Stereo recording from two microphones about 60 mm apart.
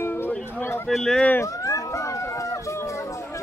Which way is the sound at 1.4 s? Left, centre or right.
Left.